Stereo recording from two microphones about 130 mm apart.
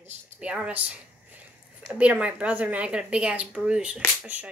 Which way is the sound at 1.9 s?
10° right (ahead or behind).